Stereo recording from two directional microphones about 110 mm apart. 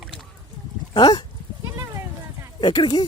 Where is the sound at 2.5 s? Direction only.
45° left (ahead or behind).